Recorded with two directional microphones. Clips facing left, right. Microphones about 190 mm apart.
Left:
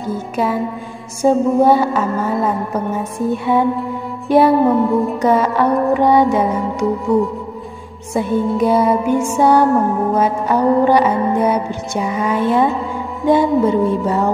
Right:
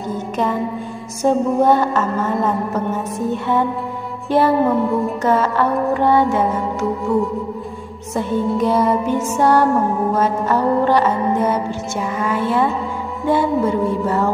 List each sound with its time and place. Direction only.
0.1 s music: 10° left (ahead or behind)
4.8 s music: centre (ahead or behind)
5.2 s music: 15° left (ahead or behind)
8.1 s music: 10° left (ahead or behind)